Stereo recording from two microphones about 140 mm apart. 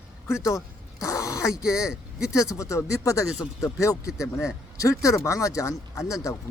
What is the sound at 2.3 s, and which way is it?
Speech, 20° left (ahead or behind).